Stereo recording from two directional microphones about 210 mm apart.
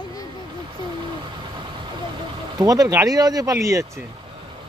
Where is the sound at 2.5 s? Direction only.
15° right (ahead or behind).